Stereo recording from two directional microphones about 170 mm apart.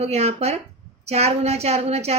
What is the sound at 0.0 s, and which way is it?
A woman's voice, 40° right (ahead or behind).